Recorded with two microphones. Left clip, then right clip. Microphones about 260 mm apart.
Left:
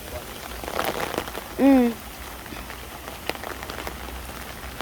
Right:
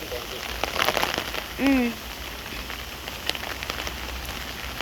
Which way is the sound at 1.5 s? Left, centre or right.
Centre.